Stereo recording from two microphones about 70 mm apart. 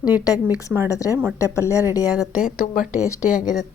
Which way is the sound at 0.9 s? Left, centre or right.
Left.